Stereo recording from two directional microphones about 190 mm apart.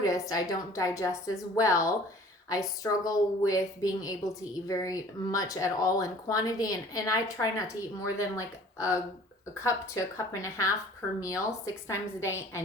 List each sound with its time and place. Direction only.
0.0 s a woman's voice: 15° left (ahead or behind)